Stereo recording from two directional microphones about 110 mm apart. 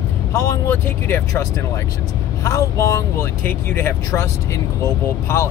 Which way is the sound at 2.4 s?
30° left (ahead or behind).